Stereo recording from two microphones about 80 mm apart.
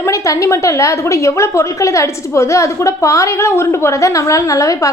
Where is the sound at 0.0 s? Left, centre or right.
Left.